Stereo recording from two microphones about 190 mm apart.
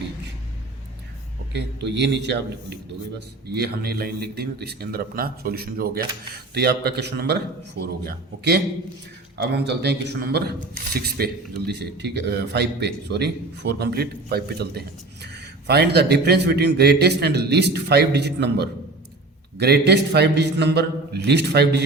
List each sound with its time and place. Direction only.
1.5 s a man's voice: 65° right (ahead or behind)